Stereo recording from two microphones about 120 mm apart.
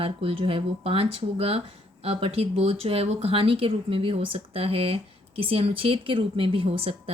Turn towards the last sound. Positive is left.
turn(degrees=-55)  # may be behind; listen again after turning